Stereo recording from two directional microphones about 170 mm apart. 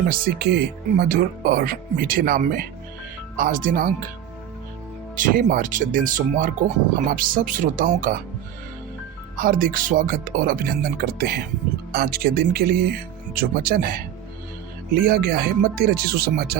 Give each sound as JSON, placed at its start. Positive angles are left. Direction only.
{"t": 0.1, "sound": "speech", "side_deg": -75}
{"t": 5.1, "sound": "speech", "side_deg": -50}
{"t": 9.4, "sound": "speech", "side_deg": -55}